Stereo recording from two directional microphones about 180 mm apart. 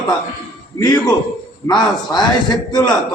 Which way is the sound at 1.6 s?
25° left (ahead or behind).